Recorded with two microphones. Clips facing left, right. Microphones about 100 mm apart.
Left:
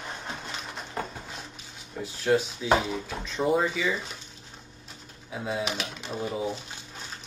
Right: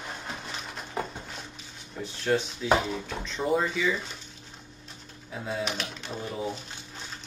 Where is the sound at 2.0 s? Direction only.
5° left (ahead or behind).